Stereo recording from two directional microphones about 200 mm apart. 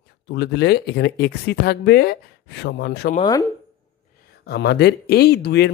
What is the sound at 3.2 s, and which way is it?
Speech, 20° left (ahead or behind).